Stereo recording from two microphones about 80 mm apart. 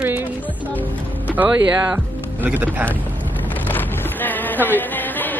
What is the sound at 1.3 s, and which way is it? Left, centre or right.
Speech, centre.